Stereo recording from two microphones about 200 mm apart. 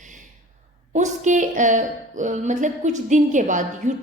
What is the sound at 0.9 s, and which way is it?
A woman's voice, 35° right (ahead or behind).